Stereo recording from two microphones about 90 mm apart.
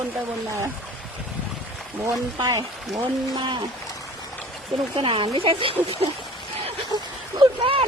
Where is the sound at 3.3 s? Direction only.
60° right (ahead or behind).